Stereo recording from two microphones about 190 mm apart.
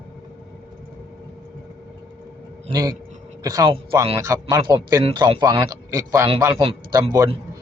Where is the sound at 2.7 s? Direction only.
20° right (ahead or behind).